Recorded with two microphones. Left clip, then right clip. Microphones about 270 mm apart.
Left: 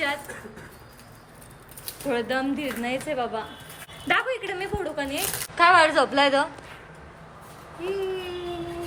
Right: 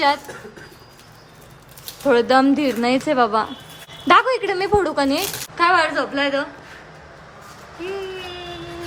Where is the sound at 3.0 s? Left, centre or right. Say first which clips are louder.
Right 11 dB; right.